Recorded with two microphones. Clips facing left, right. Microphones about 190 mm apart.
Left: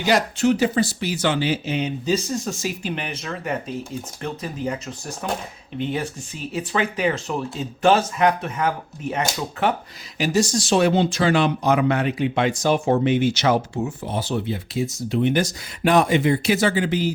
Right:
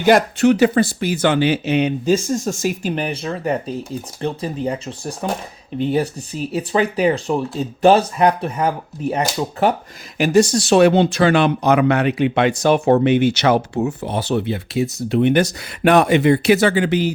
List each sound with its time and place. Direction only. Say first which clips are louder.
0.0 s speech: right 6 dB; 55° right (ahead or behind)
2.0 s speech: right 5 dB; 50° right (ahead or behind)
10.2 s speech: right 6 dB; 55° right (ahead or behind)